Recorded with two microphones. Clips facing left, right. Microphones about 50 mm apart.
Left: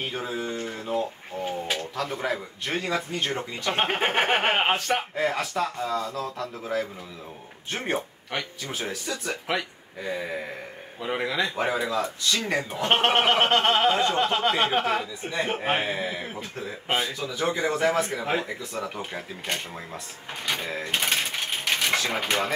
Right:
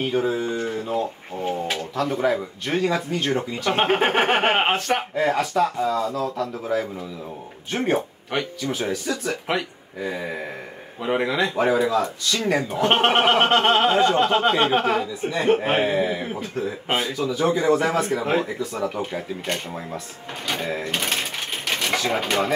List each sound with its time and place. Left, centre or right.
0.1 s speech: centre
5.8 s speech: right
8.7 s speech: centre
11.0 s speech: centre
11.7 s speech: centre
12.5 s speech: centre
20.4 s sewing machine: centre
22.1 s speech: centre